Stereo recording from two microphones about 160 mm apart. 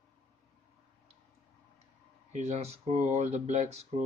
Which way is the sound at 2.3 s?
45° right (ahead or behind).